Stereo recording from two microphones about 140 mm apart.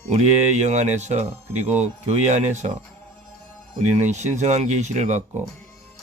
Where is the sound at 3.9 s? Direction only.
55° right (ahead or behind).